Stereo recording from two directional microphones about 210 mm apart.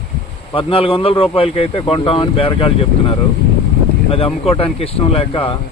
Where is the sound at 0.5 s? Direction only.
25° left (ahead or behind).